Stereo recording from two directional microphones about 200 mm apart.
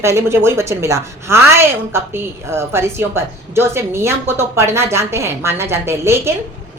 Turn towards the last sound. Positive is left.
turn(degrees=-15)  # may be behind; listen again after turning